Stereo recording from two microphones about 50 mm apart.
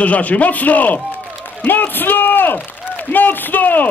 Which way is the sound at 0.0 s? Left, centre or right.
Left.